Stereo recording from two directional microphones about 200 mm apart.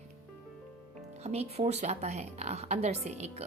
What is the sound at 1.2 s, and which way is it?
A woman's voice, 30° right (ahead or behind).